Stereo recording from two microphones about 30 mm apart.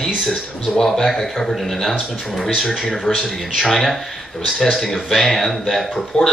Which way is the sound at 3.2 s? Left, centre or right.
Centre.